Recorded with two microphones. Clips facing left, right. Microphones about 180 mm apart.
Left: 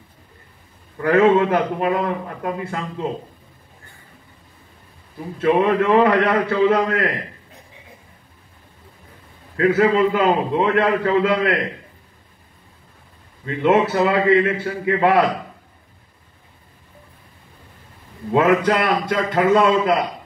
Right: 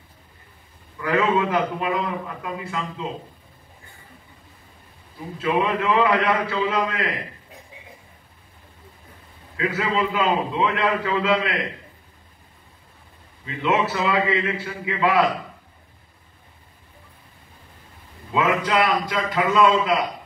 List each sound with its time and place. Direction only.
0.9 s a man's voice: 45° left (ahead or behind)
5.4 s a man's voice: 50° left (ahead or behind)
9.6 s a man's voice: 50° left (ahead or behind)
13.5 s a man's voice: 50° left (ahead or behind)
18.3 s a man's voice: 45° left (ahead or behind)